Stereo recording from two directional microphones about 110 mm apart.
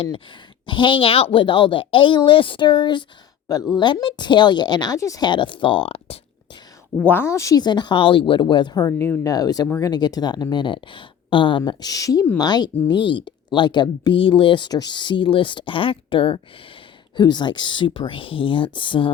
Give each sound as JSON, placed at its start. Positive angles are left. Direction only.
{"t": 0.7, "sound": "speech", "side_deg": 45}
{"t": 5.2, "sound": "speech", "side_deg": 45}
{"t": 7.0, "sound": "a woman's voice", "side_deg": 20}
{"t": 7.6, "sound": "speech", "side_deg": 40}